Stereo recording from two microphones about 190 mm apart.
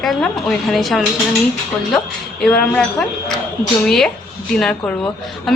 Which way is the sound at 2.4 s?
5° left (ahead or behind).